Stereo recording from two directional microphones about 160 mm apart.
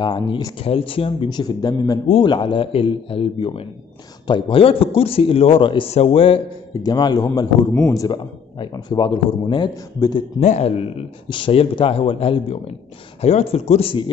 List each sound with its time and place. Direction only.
0.0 s a man's voice: 25° left (ahead or behind)
0.6 s speech: 35° left (ahead or behind)
6.7 s a man's voice: 25° left (ahead or behind)
10.4 s speech: 45° left (ahead or behind)